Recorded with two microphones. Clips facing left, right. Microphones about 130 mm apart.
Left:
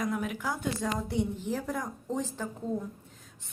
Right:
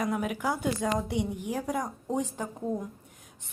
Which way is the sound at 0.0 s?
10° right (ahead or behind).